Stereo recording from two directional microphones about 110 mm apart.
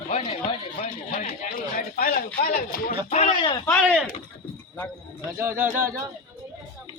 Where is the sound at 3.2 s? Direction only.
45° left (ahead or behind).